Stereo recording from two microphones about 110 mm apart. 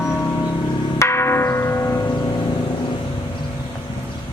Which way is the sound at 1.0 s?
25° left (ahead or behind).